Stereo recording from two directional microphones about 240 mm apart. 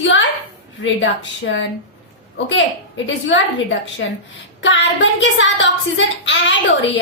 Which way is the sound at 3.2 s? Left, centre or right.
Left.